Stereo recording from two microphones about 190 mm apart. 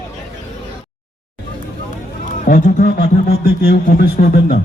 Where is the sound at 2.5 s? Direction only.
50° left (ahead or behind).